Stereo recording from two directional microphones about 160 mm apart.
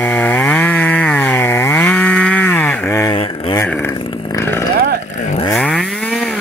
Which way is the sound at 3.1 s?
25° left (ahead or behind).